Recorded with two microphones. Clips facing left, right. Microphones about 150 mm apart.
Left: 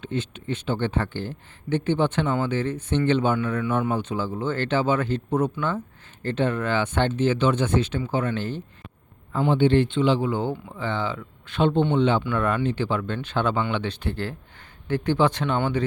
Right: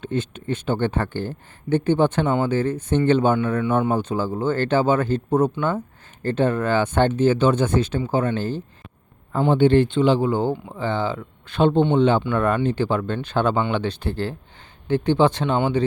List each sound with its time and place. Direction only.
0.0 s speech: 45° right (ahead or behind)
3.3 s speech: 30° right (ahead or behind)